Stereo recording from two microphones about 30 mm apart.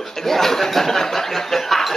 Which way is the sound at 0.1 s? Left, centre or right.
Centre.